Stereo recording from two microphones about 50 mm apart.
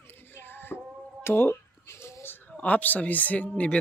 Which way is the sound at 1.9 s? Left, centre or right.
Left.